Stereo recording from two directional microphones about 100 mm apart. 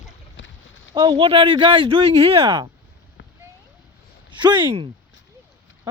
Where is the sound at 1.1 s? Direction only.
65° right (ahead or behind).